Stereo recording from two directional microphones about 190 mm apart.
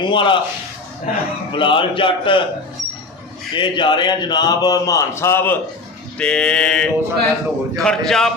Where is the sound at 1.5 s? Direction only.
25° left (ahead or behind).